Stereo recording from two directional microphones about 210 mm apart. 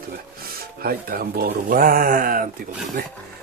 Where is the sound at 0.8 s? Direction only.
45° right (ahead or behind).